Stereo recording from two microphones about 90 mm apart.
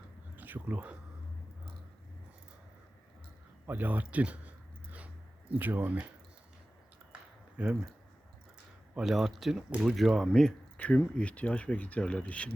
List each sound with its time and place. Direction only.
0.3 s speech: 20° right (ahead or behind)
3.7 s a sound: 20° right (ahead or behind)
5.5 s speech: 20° right (ahead or behind)
7.1 s a sound: 15° right (ahead or behind)
9.0 s speech: 5° right (ahead or behind)
10.8 s speech: 15° left (ahead or behind)